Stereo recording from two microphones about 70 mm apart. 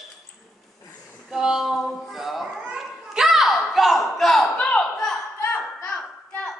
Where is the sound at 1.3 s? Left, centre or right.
Centre.